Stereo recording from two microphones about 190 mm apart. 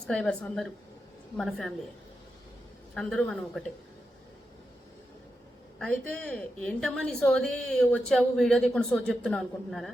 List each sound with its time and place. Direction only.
0.0 s a woman's voice: 5° left (ahead or behind)
2.9 s a woman's voice: 5° left (ahead or behind)
5.8 s a woman's voice: 5° left (ahead or behind)